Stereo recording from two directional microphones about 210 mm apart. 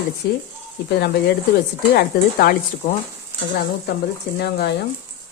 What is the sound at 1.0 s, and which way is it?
Speech, 50° left (ahead or behind).